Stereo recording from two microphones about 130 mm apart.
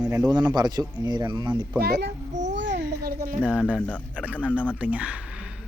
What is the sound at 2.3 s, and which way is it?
Babbling, 70° right (ahead or behind).